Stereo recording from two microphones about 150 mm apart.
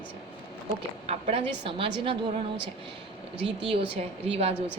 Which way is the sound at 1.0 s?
45° right (ahead or behind).